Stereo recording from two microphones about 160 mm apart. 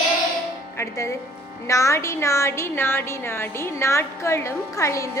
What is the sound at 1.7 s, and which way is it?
Speech, 20° left (ahead or behind).